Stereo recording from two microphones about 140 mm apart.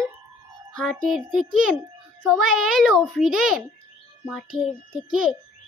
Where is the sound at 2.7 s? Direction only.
Centre (ahead or behind).